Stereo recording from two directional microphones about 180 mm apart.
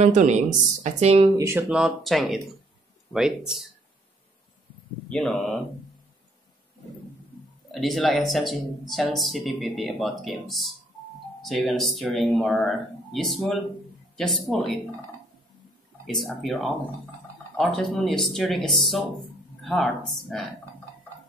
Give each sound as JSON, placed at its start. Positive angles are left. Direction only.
{"t": 0.0, "sound": "speech", "side_deg": -40}
{"t": 1.4, "sound": "speech", "side_deg": -15}
{"t": 1.7, "sound": "speech", "side_deg": 0}
{"t": 5.1, "sound": "speech", "side_deg": 0}
{"t": 7.7, "sound": "speech", "side_deg": 0}
{"t": 16.1, "sound": "speech", "side_deg": 0}